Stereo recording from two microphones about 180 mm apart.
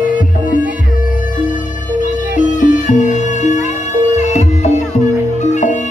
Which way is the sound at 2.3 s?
45° left (ahead or behind).